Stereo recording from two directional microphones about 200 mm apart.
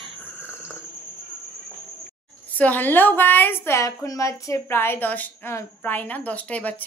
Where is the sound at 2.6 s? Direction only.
10° left (ahead or behind).